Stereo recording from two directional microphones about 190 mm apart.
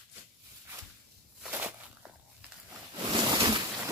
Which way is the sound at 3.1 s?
25° right (ahead or behind).